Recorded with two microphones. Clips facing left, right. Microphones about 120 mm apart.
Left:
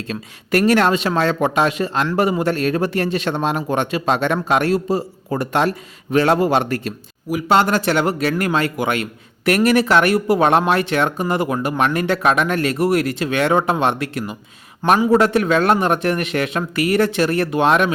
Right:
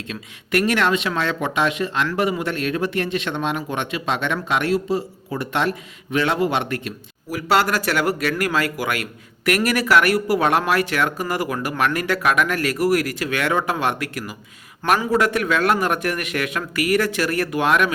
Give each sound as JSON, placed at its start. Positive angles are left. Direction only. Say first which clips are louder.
{"t": 0.1, "sound": "a man's voice", "louder": "left 3 dB", "side_deg": 40}
{"t": 7.3, "sound": "a man's voice", "louder": "left 3 dB", "side_deg": 20}